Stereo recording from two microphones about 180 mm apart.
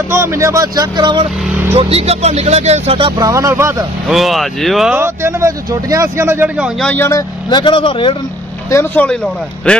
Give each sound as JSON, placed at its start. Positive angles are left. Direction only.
{"t": 0.1, "sound": "speech", "side_deg": -15}
{"t": 4.1, "sound": "speech", "side_deg": 0}
{"t": 5.0, "sound": "speech", "side_deg": -15}
{"t": 6.9, "sound": "speech", "side_deg": 15}
{"t": 8.6, "sound": "speech", "side_deg": 10}